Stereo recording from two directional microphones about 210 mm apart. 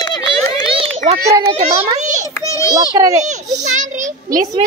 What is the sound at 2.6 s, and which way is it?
Speech, 15° right (ahead or behind).